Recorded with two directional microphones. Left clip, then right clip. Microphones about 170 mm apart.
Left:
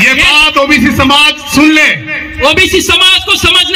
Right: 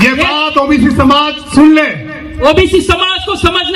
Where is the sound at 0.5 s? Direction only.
20° left (ahead or behind).